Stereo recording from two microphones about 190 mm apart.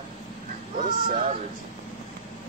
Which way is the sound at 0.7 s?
45° right (ahead or behind).